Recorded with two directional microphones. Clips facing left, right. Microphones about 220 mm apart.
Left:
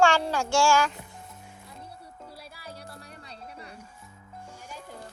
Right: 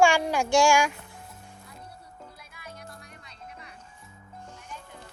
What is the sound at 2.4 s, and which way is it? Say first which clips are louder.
Music: left 2 dB; 35° left (ahead or behind).